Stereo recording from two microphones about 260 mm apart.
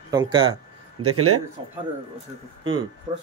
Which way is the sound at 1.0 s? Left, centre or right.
Right.